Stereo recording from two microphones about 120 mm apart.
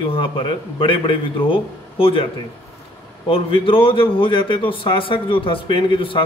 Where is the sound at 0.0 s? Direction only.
45° left (ahead or behind).